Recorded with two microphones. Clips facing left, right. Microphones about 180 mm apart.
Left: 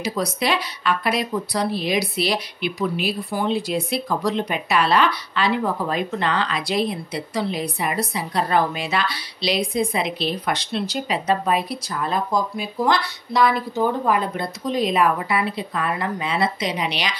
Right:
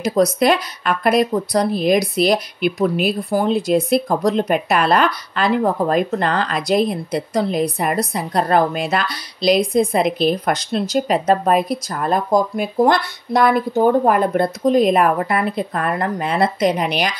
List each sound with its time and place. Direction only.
0.0 s speech: 45° right (ahead or behind)